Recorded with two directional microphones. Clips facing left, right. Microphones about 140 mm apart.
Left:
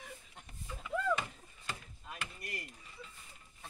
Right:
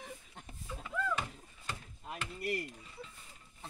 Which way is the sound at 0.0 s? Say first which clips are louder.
Right 3 dB; 30° right (ahead or behind).